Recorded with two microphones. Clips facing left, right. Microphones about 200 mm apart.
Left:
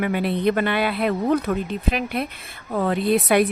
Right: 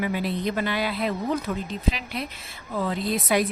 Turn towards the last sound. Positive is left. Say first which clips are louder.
# left 6 dB
turn(degrees=60)  # may be behind; listen again after turning